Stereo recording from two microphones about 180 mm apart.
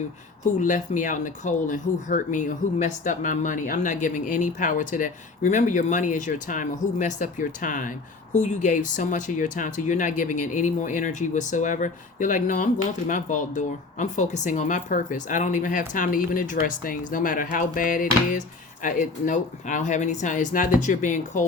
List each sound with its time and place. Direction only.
0.6 s speech: 45° left (ahead or behind)